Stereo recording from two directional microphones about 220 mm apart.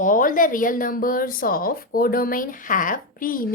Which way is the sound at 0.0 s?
40° left (ahead or behind).